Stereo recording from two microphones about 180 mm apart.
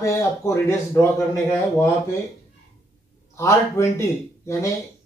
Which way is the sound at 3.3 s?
15° left (ahead or behind).